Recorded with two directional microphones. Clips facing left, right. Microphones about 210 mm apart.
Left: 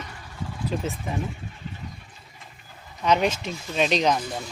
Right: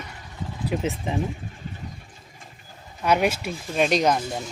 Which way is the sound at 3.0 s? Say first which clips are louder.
Right 1 dB; 10° right (ahead or behind).